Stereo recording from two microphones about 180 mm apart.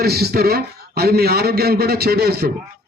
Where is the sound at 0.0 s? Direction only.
60° right (ahead or behind).